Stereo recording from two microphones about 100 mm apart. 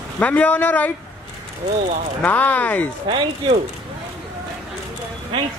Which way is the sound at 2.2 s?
15° left (ahead or behind).